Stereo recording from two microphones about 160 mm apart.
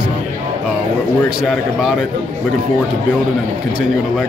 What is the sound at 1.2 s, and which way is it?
Speech, centre (ahead or behind).